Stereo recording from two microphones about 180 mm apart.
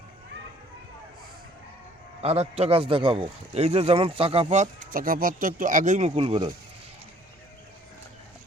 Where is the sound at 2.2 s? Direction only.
35° right (ahead or behind).